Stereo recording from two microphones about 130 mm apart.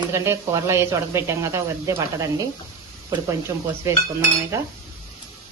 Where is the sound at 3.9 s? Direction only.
20° right (ahead or behind).